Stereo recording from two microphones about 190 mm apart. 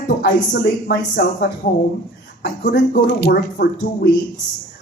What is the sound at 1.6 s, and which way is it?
Speech, 45° left (ahead or behind).